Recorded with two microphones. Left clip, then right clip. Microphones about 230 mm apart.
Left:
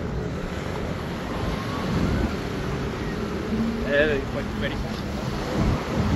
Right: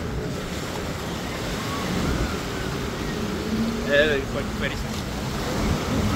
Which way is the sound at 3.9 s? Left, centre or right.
Right.